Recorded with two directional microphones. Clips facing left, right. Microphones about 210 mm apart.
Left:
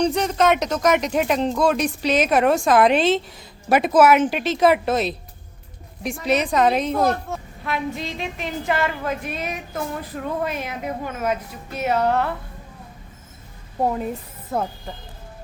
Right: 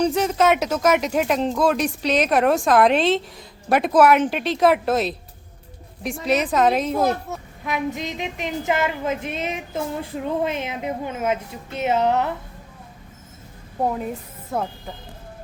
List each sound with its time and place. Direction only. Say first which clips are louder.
0.0 s a woman's voice: even; 5° right (ahead or behind)
13.8 s speech: left 1 dB; centre (ahead or behind)